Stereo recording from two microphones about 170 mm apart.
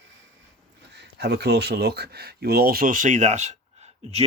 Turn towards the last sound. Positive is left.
turn(degrees=-40)  # may be behind; listen again after turning